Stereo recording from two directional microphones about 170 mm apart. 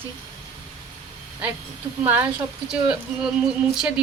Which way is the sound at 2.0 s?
10° right (ahead or behind).